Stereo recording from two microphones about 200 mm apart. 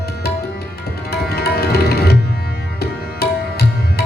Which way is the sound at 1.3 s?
50° left (ahead or behind).